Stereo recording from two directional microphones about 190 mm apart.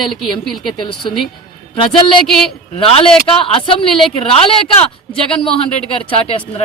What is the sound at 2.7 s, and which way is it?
Speech, 30° left (ahead or behind).